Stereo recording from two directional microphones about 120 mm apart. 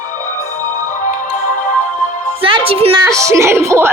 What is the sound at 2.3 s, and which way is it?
Music, 45° right (ahead or behind).